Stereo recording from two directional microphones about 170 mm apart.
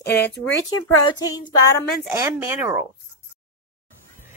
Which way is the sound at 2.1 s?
15° right (ahead or behind).